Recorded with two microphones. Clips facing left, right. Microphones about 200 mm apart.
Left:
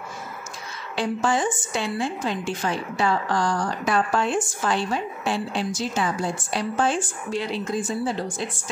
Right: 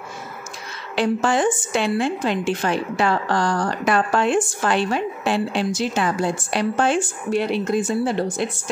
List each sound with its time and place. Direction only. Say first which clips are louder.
0.9 s a woman's voice: right 4 dB; 75° right (ahead or behind)